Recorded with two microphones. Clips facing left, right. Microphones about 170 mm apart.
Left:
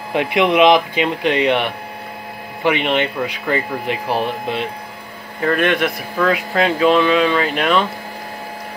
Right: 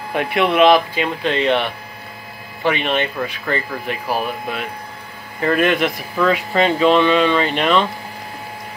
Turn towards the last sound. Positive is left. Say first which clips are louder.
# even
turn(degrees=5)  # may be behind; listen again after turning